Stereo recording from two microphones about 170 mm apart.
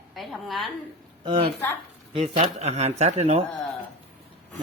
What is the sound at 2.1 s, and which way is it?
Speech, 40° right (ahead or behind).